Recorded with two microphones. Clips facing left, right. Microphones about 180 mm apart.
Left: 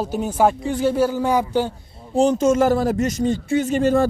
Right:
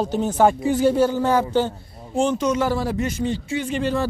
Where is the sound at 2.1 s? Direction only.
40° left (ahead or behind).